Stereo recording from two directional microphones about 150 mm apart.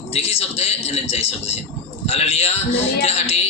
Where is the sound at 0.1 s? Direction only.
45° left (ahead or behind).